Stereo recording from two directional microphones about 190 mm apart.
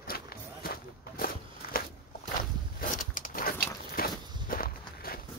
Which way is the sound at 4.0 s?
50° left (ahead or behind).